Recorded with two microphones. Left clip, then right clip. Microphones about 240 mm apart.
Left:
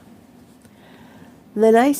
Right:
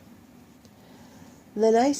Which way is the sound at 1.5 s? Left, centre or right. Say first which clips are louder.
Left 6 dB; left.